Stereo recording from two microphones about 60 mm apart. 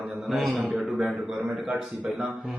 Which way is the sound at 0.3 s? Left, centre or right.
Centre.